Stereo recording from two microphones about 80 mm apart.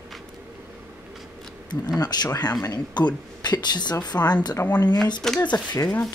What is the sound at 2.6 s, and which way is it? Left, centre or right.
A woman's voice, left.